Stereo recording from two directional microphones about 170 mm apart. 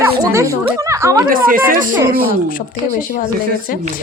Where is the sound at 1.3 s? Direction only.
55° right (ahead or behind).